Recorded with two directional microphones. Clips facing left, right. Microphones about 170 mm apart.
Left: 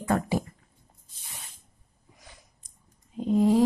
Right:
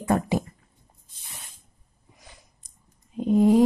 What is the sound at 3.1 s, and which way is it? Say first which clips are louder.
Speech: right 3 dB; 15° right (ahead or behind).